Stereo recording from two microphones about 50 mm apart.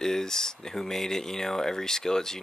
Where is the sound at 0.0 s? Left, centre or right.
Centre.